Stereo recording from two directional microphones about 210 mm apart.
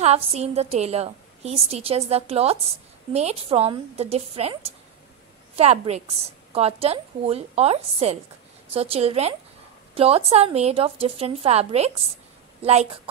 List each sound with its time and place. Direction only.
0.0 s a woman's voice: 30° right (ahead or behind)
5.6 s a woman's voice: 30° right (ahead or behind)